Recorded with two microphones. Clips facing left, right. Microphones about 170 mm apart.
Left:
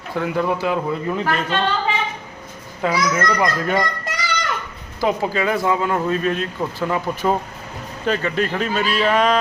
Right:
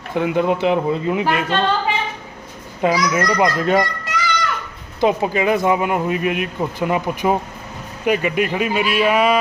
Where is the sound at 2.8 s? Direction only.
20° right (ahead or behind).